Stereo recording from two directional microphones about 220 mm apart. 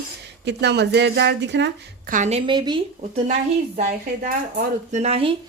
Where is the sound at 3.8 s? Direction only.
35° right (ahead or behind).